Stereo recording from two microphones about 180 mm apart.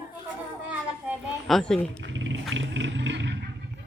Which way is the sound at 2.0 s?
90° right.